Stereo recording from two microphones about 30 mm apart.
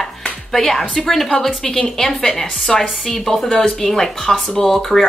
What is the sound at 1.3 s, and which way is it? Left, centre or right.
A woman's voice, left.